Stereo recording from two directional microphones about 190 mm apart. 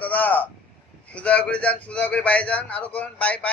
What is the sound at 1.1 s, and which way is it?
A man's voice, 5° left (ahead or behind).